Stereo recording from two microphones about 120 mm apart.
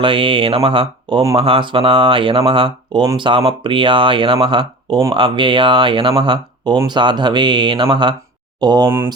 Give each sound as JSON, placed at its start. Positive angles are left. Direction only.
{"t": 0.0, "sound": "speech", "side_deg": -45}